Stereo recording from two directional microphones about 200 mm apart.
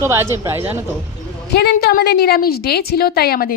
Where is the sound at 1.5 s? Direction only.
50° left (ahead or behind).